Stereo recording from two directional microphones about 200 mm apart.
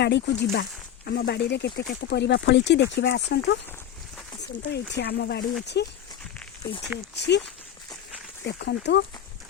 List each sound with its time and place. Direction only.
0.0 s speech: 55° left (ahead or behind)
7.2 s speech: 60° left (ahead or behind)
8.4 s speech: 55° left (ahead or behind)